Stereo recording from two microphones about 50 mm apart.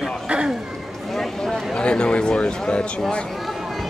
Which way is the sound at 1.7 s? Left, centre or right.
Centre.